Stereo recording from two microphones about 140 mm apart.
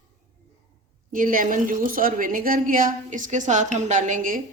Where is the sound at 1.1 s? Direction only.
80° right.